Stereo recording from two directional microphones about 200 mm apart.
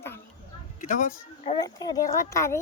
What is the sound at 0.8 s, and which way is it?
Speech, 40° left (ahead or behind).